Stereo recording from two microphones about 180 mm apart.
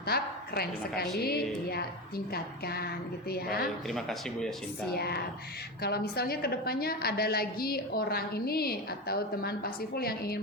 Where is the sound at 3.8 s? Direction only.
Centre (ahead or behind).